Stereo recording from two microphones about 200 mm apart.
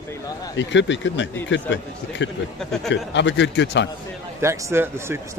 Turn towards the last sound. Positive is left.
turn(degrees=-10)  # may be behind; listen again after turning